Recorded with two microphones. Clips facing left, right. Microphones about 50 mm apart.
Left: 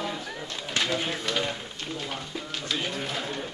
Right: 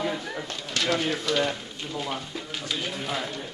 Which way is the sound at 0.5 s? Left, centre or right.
Centre.